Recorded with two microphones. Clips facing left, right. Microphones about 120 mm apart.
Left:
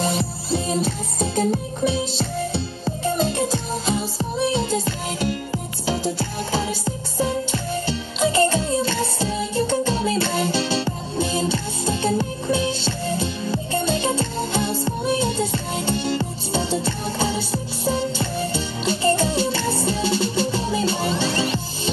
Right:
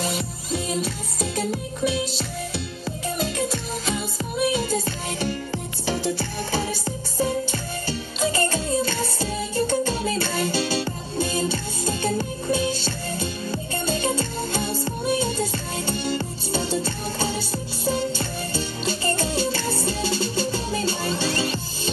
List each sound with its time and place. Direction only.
0.0 s music: 30° left (ahead or behind)
5.9 s music: 20° left (ahead or behind)